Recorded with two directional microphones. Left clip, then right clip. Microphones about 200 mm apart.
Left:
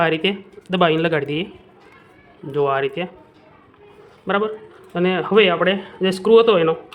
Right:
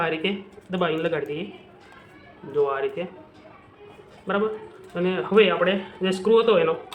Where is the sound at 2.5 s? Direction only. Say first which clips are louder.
Left 4 dB; 50° left (ahead or behind).